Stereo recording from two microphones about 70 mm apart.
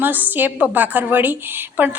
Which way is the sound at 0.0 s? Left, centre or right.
Right.